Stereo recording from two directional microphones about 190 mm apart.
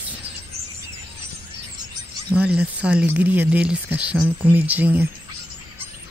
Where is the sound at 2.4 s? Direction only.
5° right (ahead or behind).